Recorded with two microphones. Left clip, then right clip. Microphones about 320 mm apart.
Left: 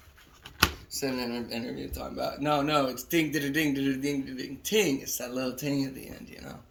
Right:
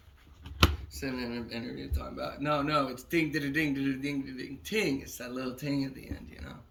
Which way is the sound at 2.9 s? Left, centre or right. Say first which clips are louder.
Left 2 dB; centre.